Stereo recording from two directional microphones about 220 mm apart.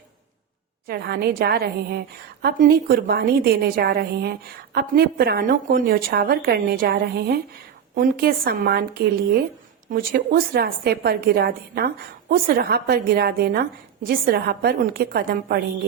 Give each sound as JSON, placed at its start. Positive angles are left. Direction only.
{"t": 0.9, "sound": "a woman's voice", "side_deg": -45}